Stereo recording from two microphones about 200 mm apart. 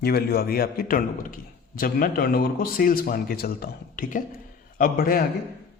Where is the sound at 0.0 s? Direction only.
50° left (ahead or behind).